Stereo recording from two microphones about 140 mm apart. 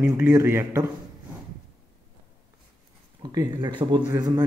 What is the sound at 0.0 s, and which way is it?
Speech, 15° right (ahead or behind).